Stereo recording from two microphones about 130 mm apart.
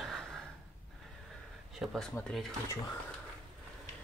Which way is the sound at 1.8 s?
Centre (ahead or behind).